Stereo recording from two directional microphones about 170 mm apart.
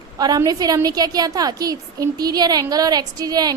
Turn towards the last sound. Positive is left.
turn(degrees=-20)  # may be behind; listen again after turning